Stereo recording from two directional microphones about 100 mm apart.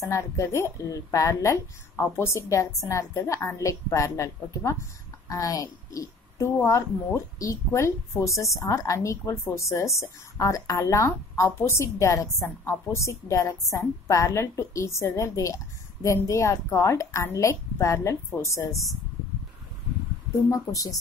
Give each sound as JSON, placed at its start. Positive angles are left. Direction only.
{"t": 0.0, "sound": "a woman's voice", "side_deg": 30}
{"t": 20.4, "sound": "a woman's voice", "side_deg": 35}